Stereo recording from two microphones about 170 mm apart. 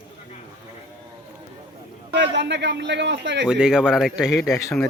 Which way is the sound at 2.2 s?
90° right.